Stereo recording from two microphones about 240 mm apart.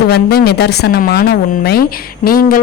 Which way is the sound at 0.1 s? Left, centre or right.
Left.